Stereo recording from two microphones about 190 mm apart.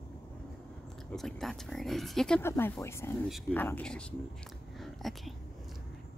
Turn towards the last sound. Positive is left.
turn(degrees=0)  # may be behind; listen again after turning